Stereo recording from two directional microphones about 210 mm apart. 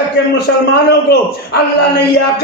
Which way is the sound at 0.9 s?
50° left (ahead or behind).